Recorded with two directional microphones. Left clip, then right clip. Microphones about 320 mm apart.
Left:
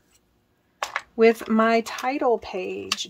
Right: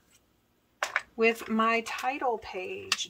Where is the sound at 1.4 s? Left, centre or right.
Centre.